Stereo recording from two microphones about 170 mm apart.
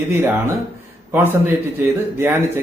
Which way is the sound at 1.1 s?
10° right (ahead or behind).